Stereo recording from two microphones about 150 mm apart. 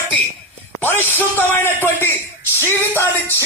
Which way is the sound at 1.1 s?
15° left (ahead or behind).